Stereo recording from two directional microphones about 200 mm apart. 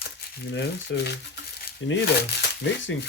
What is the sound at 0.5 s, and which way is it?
Speech, 60° left (ahead or behind).